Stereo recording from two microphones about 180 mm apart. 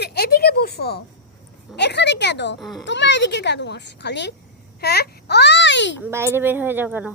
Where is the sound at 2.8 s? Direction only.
80° left.